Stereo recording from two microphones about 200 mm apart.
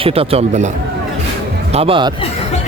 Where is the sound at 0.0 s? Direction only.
30° right (ahead or behind).